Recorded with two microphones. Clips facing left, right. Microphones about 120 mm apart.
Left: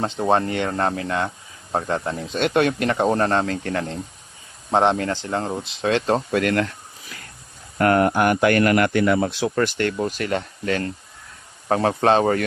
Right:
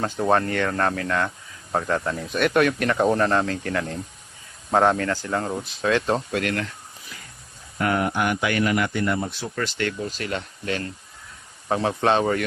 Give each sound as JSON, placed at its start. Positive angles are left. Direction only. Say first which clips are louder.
{"t": 0.2, "sound": "speech", "louder": "left 1 dB", "side_deg": 20}
{"t": 4.7, "sound": "speech", "louder": "left 1 dB", "side_deg": 25}
{"t": 6.3, "sound": "speech", "louder": "left 5 dB", "side_deg": 50}
{"t": 7.1, "sound": "a sound", "louder": "left 3 dB", "side_deg": 65}
{"t": 7.8, "sound": "speech", "louder": "left 6 dB", "side_deg": 50}
{"t": 9.6, "sound": "speech", "louder": "left 4 dB", "side_deg": 50}